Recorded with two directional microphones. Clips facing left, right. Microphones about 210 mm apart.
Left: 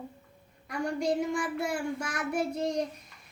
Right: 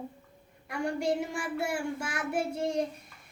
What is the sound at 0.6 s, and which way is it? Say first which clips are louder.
Child singing: even; 5° right (ahead or behind).